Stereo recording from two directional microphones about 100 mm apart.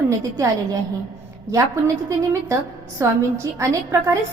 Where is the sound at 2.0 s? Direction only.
30° right (ahead or behind).